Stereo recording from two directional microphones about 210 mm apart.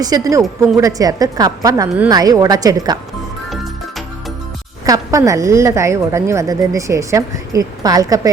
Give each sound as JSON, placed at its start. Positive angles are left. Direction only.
{"t": 0.0, "sound": "a woman's voice", "side_deg": -15}
{"t": 3.5, "sound": "music", "side_deg": 0}
{"t": 4.9, "sound": "a woman's voice", "side_deg": -15}